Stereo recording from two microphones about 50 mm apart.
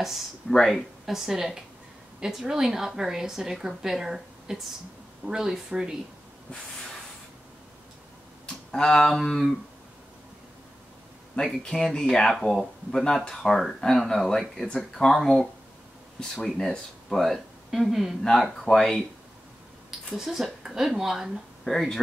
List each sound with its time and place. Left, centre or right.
0.0 s a woman's voice: centre
8.7 s speech: centre
11.3 s speech: centre
13.3 s speech: centre
16.4 s a woman's voice: centre
18.6 s speech: centre
20.1 s a woman's voice: centre
21.6 s speech: centre